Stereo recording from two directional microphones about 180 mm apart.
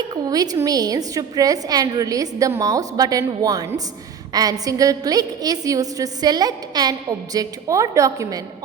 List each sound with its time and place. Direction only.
0.1 s a woman's voice: 20° right (ahead or behind)